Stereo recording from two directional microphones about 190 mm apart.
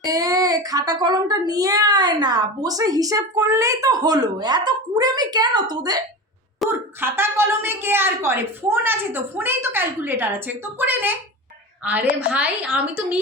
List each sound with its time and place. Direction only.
0.0 s a child's voice: 20° right (ahead or behind)